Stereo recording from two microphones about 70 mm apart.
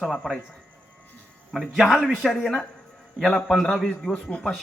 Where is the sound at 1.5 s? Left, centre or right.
Centre.